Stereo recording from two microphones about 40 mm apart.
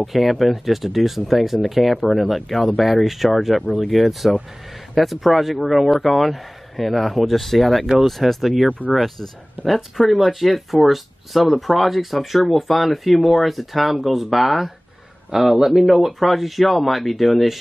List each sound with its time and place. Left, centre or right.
0.0 s speech: centre
8.8 s speech: left
9.7 s speech: centre